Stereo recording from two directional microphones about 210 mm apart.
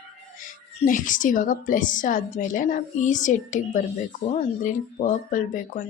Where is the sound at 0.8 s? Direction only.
40° left (ahead or behind).